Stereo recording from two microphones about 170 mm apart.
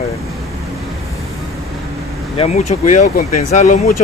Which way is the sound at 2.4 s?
45° left (ahead or behind).